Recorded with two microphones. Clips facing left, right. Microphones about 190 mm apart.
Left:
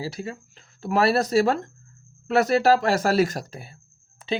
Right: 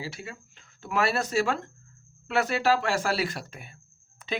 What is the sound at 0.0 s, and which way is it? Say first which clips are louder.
Speech: left 7 dB; 35° left (ahead or behind).